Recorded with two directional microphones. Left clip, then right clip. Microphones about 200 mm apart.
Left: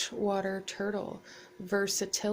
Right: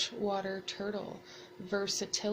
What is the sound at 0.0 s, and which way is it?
Speech, 45° left (ahead or behind).